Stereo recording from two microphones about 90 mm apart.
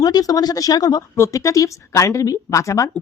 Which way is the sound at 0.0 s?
45° left (ahead or behind).